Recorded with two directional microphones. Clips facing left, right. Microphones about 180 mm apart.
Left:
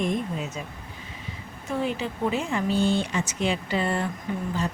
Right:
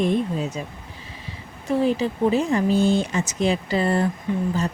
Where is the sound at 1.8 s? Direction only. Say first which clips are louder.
Right 6 dB; 35° right (ahead or behind).